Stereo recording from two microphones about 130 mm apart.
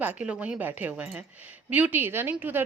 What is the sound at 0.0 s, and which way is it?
A woman's voice, 10° right (ahead or behind).